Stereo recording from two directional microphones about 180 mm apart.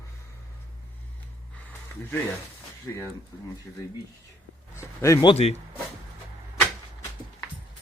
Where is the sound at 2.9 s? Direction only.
15° left (ahead or behind).